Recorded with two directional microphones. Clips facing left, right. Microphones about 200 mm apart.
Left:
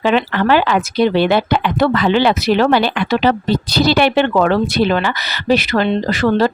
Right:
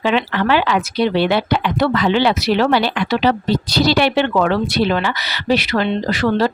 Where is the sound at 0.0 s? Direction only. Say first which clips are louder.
Left 2 dB; 45° left (ahead or behind).